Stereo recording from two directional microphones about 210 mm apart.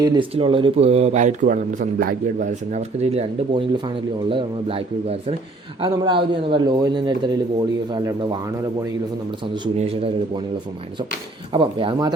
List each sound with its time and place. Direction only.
0.0 s speech: 20° right (ahead or behind)
9.9 s speech: 25° right (ahead or behind)
11.5 s speech: 25° right (ahead or behind)